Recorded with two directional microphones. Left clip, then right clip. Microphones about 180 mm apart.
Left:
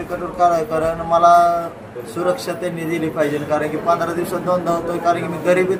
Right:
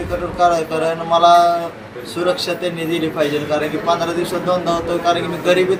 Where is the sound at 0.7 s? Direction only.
5° left (ahead or behind).